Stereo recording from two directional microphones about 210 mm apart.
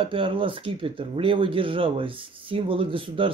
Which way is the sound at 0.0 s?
25° right (ahead or behind).